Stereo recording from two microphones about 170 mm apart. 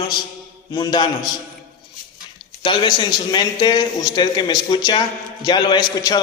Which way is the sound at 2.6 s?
25° left (ahead or behind).